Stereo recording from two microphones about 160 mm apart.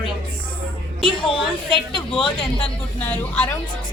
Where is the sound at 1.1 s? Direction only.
30° left (ahead or behind).